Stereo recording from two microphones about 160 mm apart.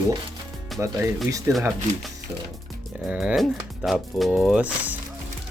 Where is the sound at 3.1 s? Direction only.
5° right (ahead or behind).